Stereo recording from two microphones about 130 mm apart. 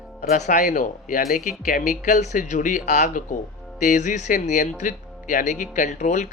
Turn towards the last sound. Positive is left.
turn(degrees=70)  # may be behind; listen again after turning